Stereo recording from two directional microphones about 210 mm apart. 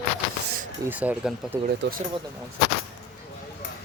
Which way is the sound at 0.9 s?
5° right (ahead or behind).